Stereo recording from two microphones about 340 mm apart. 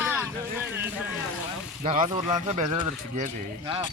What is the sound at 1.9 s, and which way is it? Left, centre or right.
Speech, centre.